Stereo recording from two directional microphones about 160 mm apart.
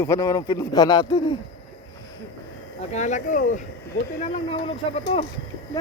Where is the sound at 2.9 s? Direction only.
50° left (ahead or behind).